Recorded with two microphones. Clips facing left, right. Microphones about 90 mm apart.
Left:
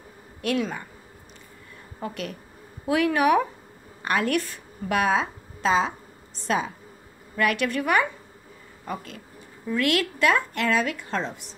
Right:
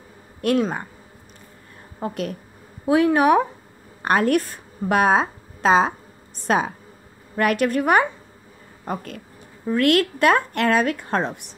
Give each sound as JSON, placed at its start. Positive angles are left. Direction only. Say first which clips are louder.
{"t": 0.4, "sound": "speech", "louder": "right 6 dB", "side_deg": -45}
{"t": 2.0, "sound": "a woman's voice", "louder": "right 5 dB", "side_deg": -35}
{"t": 4.0, "sound": "a woman's voice", "louder": "right 5 dB", "side_deg": -40}
{"t": 7.3, "sound": "a woman's voice", "louder": "right 4 dB", "side_deg": -45}